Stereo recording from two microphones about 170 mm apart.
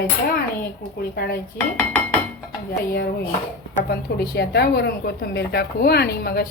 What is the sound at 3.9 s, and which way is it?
A woman's voice, 70° left (ahead or behind).